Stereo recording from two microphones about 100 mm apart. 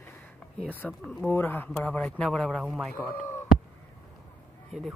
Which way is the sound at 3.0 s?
5° right (ahead or behind).